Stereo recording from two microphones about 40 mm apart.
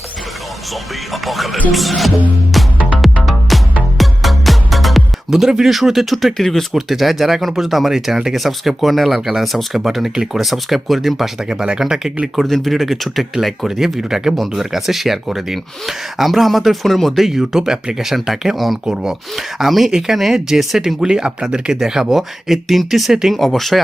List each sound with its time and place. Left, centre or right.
1.1 s speech: centre
3.0 s music: centre
5.3 s speech: centre
6.7 s speech: centre
9.4 s speech: centre
9.7 s speech: centre
11.4 s speech: centre
12.4 s speech: centre
17.2 s speech: centre
22.4 s speech: centre